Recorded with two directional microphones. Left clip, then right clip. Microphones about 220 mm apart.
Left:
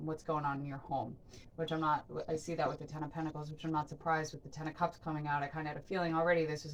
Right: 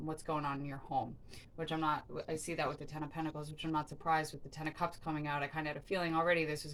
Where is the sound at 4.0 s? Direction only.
15° right (ahead or behind).